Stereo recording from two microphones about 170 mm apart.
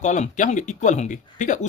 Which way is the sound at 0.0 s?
45° left (ahead or behind).